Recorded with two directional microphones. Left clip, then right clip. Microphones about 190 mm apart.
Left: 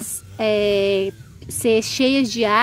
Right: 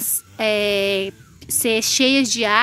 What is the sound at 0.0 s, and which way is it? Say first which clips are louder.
Speech: even; centre (ahead or behind).